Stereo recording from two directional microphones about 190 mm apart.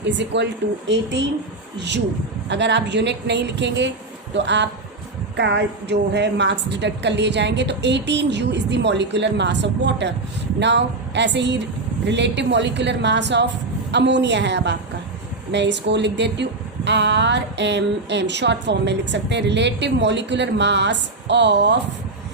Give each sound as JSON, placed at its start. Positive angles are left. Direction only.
{"t": 0.0, "sound": "speech", "side_deg": -65}
{"t": 2.5, "sound": "a woman's voice", "side_deg": -65}